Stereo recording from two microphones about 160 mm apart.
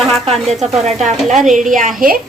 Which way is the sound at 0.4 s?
45° right (ahead or behind).